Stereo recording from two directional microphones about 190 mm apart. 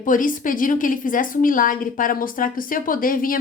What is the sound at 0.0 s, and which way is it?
A woman's voice, 45° left (ahead or behind).